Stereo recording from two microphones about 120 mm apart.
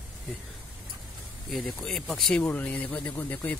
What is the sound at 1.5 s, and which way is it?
Speech, centre (ahead or behind).